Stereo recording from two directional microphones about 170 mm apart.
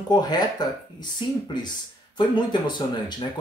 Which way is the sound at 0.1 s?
25° left (ahead or behind).